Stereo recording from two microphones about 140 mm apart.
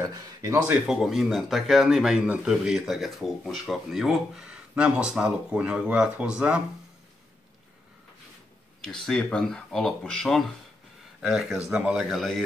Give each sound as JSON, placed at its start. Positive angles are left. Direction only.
{"t": 0.0, "sound": "speech", "side_deg": -25}
{"t": 0.7, "sound": "speech", "side_deg": -5}
{"t": 8.8, "sound": "speech", "side_deg": 0}